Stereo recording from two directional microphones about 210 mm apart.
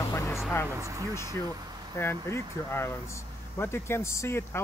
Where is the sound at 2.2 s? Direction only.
15° left (ahead or behind).